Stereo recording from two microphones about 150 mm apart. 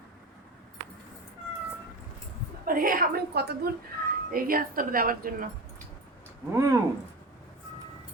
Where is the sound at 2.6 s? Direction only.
70° right (ahead or behind); by 3.6 s 90° right.